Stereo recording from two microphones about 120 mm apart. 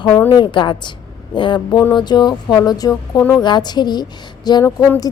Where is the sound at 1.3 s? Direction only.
40° left (ahead or behind).